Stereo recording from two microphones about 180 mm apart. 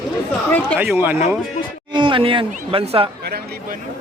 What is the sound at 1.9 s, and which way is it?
Speech, 30° right (ahead or behind).